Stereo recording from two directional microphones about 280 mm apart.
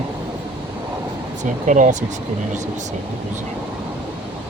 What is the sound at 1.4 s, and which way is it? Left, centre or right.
Speech, right.